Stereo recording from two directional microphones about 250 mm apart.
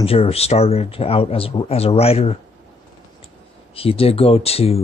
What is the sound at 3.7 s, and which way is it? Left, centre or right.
Speech, left.